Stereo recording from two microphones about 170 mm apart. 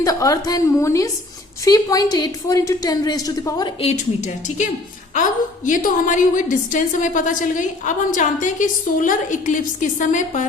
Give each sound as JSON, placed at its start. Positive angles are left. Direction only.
{"t": 0.0, "sound": "a woman's voice", "side_deg": 20}
{"t": 3.8, "sound": "a woman's voice", "side_deg": 40}